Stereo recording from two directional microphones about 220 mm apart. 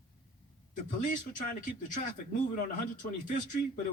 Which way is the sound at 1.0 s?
35° left (ahead or behind).